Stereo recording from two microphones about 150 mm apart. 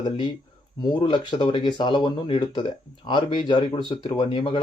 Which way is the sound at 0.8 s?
30° left (ahead or behind).